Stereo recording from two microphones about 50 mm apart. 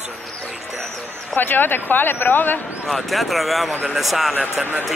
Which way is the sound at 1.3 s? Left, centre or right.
Left.